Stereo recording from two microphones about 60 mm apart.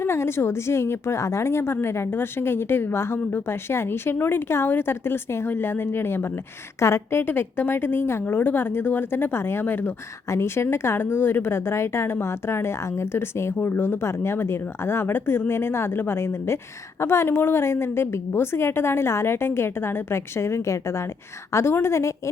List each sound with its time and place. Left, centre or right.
0.0 s a woman's voice: left
10.2 s a woman's voice: left